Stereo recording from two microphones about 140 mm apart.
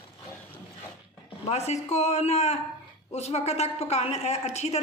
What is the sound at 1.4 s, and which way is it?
A woman's voice, 50° left (ahead or behind).